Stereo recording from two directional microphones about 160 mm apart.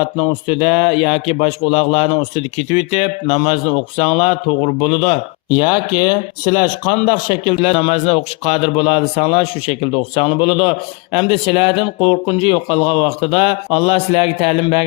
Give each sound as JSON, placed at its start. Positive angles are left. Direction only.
{"t": 0.0, "sound": "a man's voice", "side_deg": 35}